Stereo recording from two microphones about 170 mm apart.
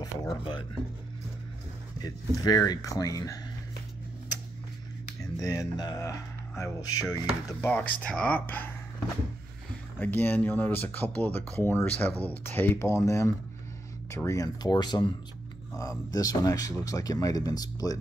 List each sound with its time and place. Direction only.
0.0 s speech: 25° left (ahead or behind)
2.0 s speech: 20° left (ahead or behind)
5.2 s speech: 20° left (ahead or behind)
9.9 s speech: 10° left (ahead or behind)